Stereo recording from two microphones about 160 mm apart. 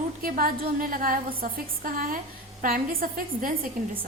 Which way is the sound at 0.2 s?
65° right (ahead or behind).